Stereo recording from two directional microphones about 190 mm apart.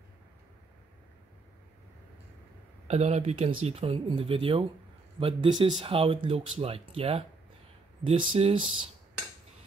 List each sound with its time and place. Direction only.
2.9 s speech: 35° right (ahead or behind)